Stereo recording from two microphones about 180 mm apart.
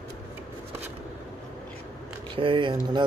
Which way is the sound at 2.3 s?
30° right (ahead or behind).